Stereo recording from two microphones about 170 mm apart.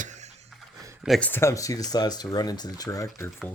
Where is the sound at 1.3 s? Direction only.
15° left (ahead or behind).